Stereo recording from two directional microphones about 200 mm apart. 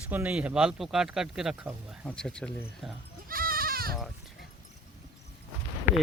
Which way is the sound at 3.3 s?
45° right (ahead or behind).